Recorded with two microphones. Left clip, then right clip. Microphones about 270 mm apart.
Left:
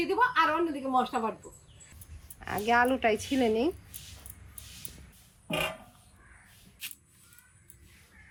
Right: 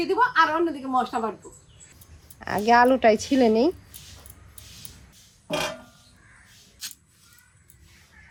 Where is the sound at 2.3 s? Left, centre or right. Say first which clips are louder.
Right 7 dB; right.